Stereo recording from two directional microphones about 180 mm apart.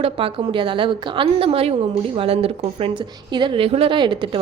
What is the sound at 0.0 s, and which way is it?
A woman's voice, 30° right (ahead or behind).